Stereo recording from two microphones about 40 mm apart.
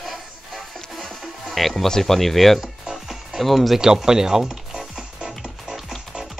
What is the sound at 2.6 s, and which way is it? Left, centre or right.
Music, centre.